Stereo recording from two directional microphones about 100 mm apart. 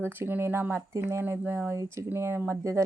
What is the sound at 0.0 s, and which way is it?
A woman's voice, 20° right (ahead or behind).